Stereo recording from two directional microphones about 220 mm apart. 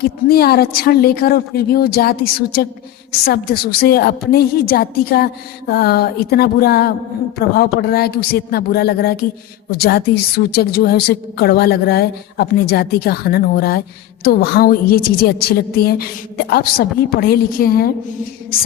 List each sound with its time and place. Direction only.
0.0 s a woman's voice: 45° left (ahead or behind)